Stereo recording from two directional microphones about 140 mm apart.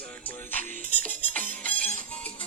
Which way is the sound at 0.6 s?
65° right (ahead or behind).